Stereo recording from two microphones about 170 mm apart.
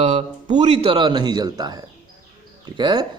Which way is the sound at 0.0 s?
45° right (ahead or behind).